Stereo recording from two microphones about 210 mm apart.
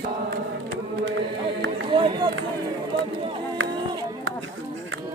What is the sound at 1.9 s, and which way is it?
Run, 20° right (ahead or behind).